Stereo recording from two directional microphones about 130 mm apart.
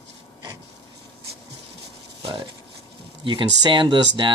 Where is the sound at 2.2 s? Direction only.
45° right (ahead or behind).